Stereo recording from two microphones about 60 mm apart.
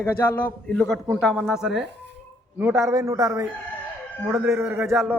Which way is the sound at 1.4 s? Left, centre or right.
Centre.